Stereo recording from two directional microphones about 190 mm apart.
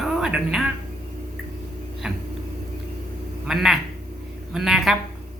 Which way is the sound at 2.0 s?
5° right (ahead or behind).